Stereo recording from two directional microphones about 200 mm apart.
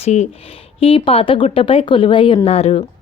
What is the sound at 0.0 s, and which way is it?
A woman's voice, 30° left (ahead or behind).